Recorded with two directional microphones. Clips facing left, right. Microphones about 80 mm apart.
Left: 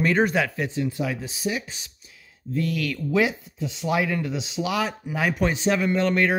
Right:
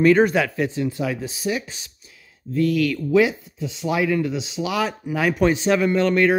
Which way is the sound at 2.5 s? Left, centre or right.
Left.